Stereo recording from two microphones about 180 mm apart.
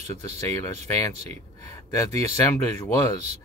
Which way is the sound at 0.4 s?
15° left (ahead or behind).